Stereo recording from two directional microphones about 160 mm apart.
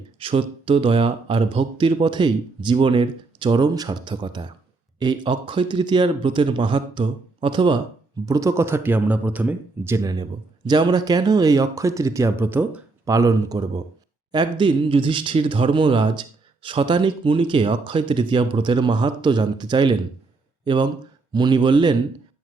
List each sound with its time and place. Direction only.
0.2 s speech: 35° right (ahead or behind)
8.2 s speech: 20° right (ahead or behind)